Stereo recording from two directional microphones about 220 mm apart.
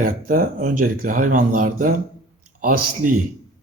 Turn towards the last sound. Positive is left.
turn(degrees=-40)  # may be behind; listen again after turning